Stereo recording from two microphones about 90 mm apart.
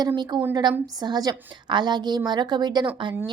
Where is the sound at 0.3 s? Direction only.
50° right (ahead or behind).